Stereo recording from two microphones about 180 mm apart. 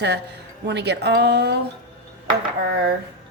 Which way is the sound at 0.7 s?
70° right (ahead or behind).